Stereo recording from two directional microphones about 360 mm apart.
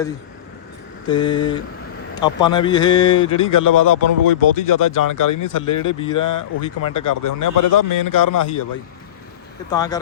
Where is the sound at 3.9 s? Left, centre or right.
Left.